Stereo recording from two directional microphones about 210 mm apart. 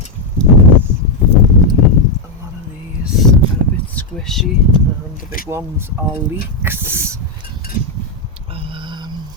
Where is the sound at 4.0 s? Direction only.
5° left (ahead or behind).